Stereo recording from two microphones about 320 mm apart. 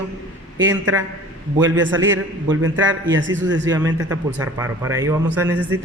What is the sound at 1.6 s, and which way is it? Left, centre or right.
A man's voice, right.